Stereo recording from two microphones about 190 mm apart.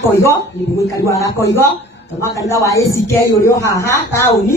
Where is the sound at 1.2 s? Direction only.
10° left (ahead or behind).